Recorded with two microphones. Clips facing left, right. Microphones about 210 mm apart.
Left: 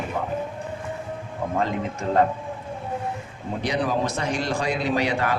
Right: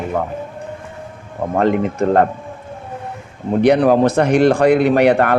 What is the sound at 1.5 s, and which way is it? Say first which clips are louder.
Speech: right 10 dB; 65° right (ahead or behind).